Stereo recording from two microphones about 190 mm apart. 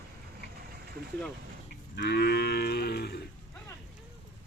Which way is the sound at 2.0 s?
55° left (ahead or behind).